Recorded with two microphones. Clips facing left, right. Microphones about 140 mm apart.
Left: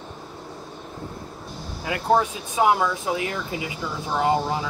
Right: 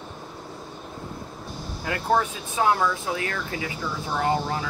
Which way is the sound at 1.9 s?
10° left (ahead or behind).